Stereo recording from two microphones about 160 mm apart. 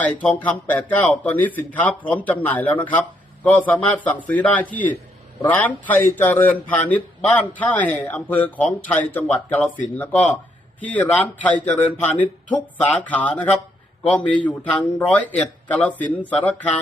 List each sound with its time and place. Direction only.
0.0 s a man's voice: 10° left (ahead or behind)